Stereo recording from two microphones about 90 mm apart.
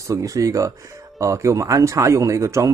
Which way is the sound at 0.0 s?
40° right (ahead or behind).